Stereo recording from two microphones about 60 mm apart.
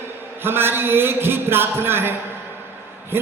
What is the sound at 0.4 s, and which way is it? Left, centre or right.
Speech, right.